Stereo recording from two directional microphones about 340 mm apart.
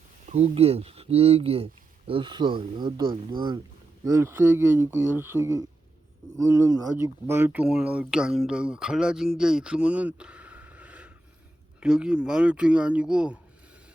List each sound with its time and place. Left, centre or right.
0.3 s speech: centre
9.4 s a sound: centre
11.8 s speech: centre